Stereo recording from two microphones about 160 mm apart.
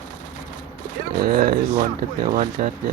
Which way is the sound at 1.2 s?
70° right (ahead or behind).